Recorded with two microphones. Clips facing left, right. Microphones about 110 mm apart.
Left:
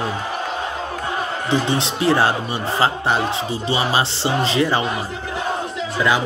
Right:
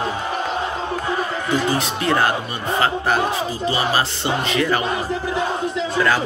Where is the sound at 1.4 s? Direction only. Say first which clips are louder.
Left 1 dB; 25° left (ahead or behind).